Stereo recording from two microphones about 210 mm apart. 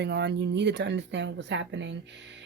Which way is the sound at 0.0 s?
55° right (ahead or behind).